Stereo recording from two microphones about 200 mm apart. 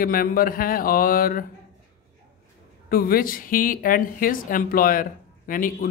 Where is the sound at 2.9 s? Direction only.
45° left (ahead or behind).